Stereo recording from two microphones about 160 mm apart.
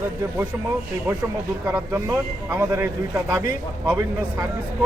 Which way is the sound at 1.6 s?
15° right (ahead or behind).